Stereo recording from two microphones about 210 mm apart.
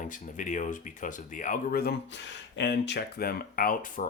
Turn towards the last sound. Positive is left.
turn(degrees=40)  # may be behind; listen again after turning